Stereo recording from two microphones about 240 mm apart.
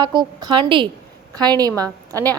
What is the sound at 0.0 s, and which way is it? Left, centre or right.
A woman's voice, centre.